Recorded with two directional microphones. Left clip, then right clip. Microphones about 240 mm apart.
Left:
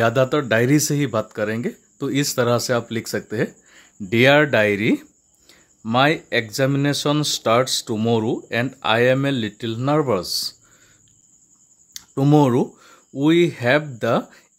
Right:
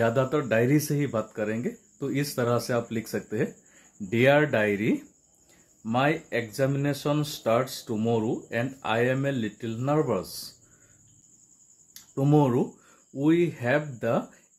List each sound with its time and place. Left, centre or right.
0.0 s speech: left
5.5 s a sound: left
6.5 s speech: left
11.9 s speech: left